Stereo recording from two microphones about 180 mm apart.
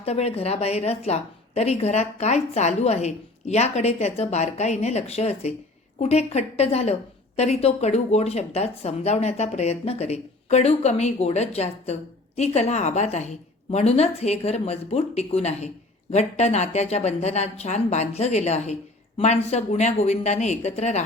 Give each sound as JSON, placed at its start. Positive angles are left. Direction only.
{"t": 0.0, "sound": "a woman's voice", "side_deg": 35}